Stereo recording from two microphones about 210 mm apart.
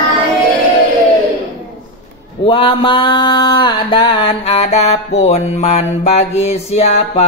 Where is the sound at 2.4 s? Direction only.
25° left (ahead or behind).